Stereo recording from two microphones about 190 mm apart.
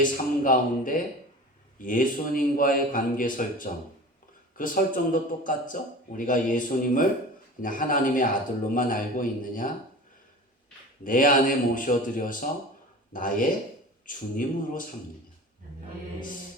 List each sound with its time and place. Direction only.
0.4 s a man's voice: 45° left (ahead or behind)
11.0 s a man's voice: 45° left (ahead or behind)